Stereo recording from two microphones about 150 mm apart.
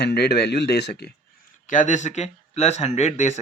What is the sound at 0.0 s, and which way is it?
Speech, 90° left.